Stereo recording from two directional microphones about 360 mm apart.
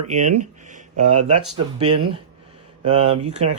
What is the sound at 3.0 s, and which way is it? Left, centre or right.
Speech, right.